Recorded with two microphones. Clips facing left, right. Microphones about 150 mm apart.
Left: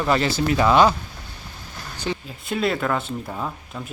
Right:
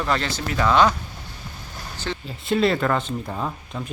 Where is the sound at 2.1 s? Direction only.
15° left (ahead or behind).